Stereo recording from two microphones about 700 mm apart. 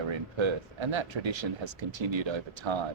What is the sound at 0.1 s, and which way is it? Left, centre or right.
Speech, right.